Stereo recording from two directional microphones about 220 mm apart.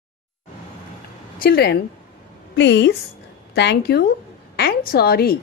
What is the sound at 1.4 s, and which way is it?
A woman's voice, 45° left (ahead or behind).